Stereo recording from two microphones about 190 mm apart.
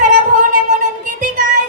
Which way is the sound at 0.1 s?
40° right (ahead or behind).